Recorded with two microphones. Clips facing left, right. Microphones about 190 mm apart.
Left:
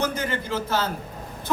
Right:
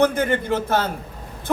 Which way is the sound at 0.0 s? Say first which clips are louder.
Right 8 dB; 55° right (ahead or behind).